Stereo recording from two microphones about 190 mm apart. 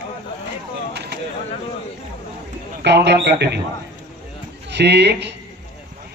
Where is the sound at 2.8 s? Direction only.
65° right (ahead or behind).